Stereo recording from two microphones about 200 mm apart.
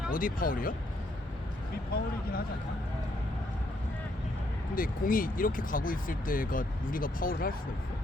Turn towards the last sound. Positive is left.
turn(degrees=45)  # may be behind; listen again after turning